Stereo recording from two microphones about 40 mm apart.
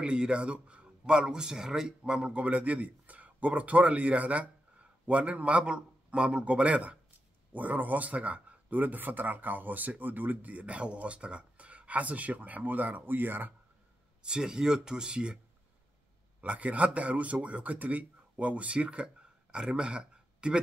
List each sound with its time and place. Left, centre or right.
0.0 s speech: right
7.5 s speech: right
13.0 s speech: right
14.2 s speech: centre
16.3 s speech: right